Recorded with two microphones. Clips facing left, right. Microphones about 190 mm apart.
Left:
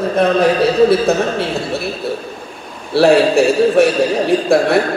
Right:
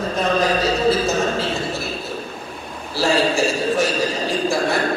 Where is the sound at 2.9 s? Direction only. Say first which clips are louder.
Left 9 dB; 60° left (ahead or behind).